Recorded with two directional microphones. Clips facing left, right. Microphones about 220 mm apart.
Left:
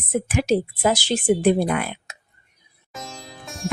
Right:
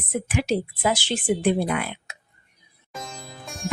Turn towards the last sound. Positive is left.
turn(degrees=0)  # may be behind; listen again after turning